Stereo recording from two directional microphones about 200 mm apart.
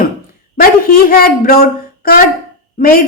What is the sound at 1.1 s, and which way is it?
A woman's voice, 50° left (ahead or behind).